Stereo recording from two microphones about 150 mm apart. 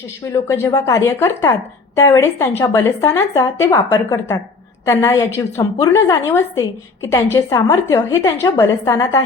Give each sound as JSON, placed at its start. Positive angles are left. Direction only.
{"t": 0.3, "sound": "a woman's voice", "side_deg": 20}